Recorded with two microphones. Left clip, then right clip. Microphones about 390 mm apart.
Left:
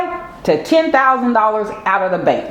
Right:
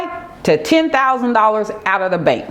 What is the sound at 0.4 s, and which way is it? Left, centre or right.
Speech, right.